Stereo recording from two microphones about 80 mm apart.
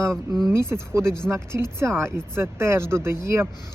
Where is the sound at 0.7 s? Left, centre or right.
Right.